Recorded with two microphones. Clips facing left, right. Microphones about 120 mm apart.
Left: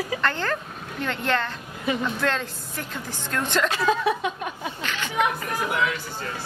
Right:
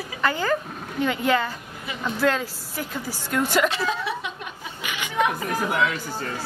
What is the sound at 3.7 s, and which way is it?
Speech, 45° left (ahead or behind).